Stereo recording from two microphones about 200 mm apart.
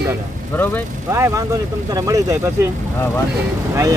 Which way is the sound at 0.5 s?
10° left (ahead or behind).